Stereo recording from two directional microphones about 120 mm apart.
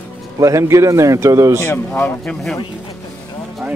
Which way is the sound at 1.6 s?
20° left (ahead or behind).